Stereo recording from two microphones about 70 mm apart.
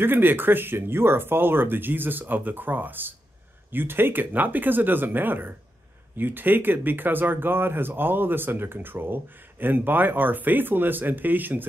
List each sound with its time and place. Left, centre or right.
0.0 s speech: right